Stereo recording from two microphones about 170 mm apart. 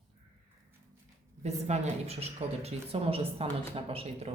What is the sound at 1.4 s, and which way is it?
Speech, 40° right (ahead or behind).